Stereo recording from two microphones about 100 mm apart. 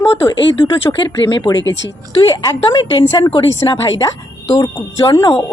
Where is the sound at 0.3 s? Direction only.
55° left (ahead or behind).